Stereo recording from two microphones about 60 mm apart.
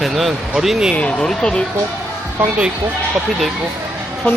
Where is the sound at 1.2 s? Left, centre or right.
Centre.